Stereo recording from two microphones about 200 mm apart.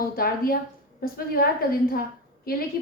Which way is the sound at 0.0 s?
45° left (ahead or behind).